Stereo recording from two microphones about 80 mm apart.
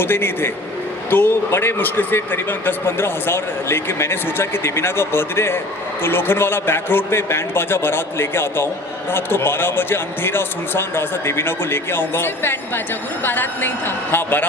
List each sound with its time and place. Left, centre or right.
0.0 s speech: left